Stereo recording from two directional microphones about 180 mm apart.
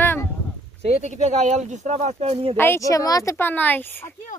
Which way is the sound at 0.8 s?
35° right (ahead or behind).